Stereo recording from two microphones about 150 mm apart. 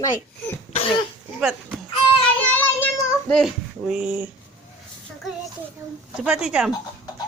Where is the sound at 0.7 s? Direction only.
40° left (ahead or behind).